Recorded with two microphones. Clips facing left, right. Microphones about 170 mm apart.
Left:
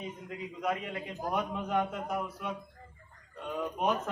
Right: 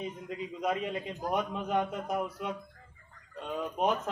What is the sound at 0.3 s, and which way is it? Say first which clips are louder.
Speech: right 1 dB; 20° right (ahead or behind).